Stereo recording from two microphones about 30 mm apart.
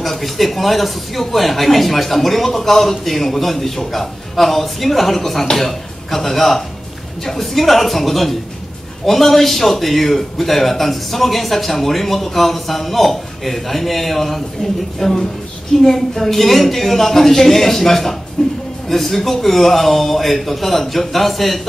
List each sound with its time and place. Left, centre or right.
0.0 s a man's voice: centre